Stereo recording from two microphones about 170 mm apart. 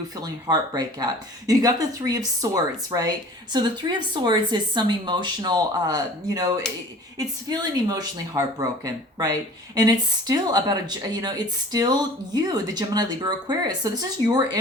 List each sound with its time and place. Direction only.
0.2 s speech: 20° right (ahead or behind)